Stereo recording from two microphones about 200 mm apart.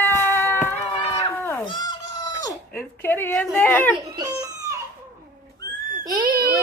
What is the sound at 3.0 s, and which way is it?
Speech, 10° left (ahead or behind).